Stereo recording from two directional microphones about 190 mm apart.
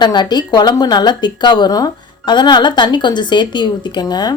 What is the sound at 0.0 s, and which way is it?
A woman's voice, 20° left (ahead or behind).